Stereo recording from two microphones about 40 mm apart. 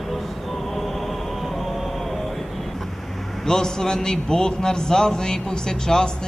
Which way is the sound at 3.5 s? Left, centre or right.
Centre.